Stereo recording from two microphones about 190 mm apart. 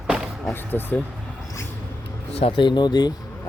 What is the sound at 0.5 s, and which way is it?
Speech, 10° left (ahead or behind).